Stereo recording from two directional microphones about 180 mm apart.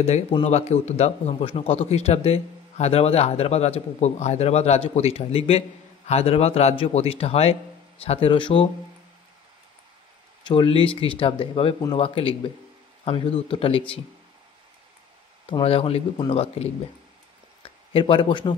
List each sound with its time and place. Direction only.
0.0 s speech: 35° left (ahead or behind)
10.4 s speech: 30° left (ahead or behind)
15.6 s speech: 35° left (ahead or behind)
17.6 s speech: 30° left (ahead or behind)